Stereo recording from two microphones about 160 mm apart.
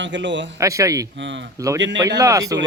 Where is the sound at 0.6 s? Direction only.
20° right (ahead or behind).